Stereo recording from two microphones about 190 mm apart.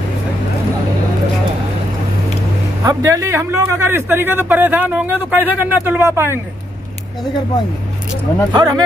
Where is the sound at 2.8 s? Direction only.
15° right (ahead or behind).